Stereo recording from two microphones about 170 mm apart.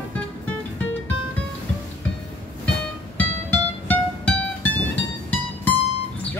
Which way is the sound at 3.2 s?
10° left (ahead or behind).